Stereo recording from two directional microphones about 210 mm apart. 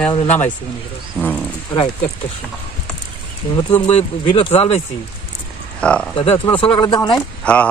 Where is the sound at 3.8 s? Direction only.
25° left (ahead or behind).